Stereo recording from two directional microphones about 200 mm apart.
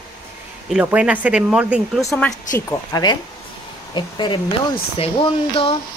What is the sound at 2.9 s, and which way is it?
Speech, 20° left (ahead or behind).